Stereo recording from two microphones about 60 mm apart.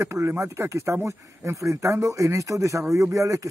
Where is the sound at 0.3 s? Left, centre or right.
Right.